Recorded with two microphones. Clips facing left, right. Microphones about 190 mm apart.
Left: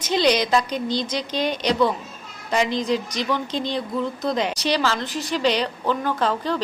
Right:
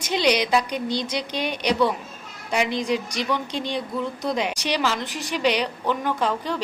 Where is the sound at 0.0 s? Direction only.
10° right (ahead or behind).